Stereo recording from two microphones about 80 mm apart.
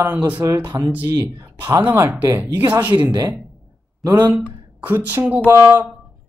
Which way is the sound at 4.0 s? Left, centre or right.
Right.